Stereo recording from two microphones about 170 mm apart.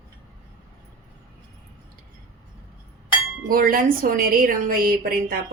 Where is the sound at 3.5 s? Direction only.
55° right (ahead or behind).